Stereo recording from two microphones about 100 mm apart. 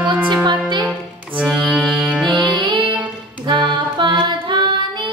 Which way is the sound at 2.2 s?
50° right (ahead or behind).